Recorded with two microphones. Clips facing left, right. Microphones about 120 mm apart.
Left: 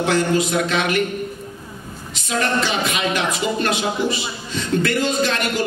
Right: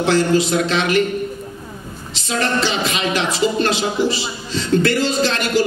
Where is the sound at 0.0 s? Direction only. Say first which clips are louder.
Right 3 dB; 30° right (ahead or behind).